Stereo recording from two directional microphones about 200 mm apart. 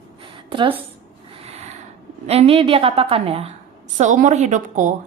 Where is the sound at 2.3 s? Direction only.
30° right (ahead or behind).